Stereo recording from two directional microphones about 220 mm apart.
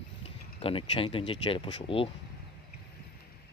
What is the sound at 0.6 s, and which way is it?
Speech, 25° left (ahead or behind).